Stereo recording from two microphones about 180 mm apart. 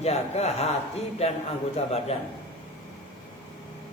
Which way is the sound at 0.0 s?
35° left (ahead or behind).